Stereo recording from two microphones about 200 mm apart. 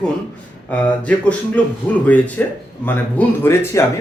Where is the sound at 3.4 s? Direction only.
15° left (ahead or behind).